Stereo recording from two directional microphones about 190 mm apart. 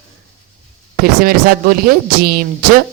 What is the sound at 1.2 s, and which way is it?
A woman's voice, 50° right (ahead or behind).